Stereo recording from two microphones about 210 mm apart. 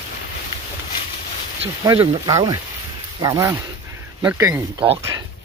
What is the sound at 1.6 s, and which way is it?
Speech, 25° right (ahead or behind).